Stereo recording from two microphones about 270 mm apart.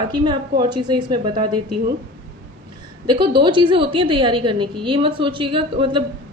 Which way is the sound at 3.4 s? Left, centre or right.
Centre.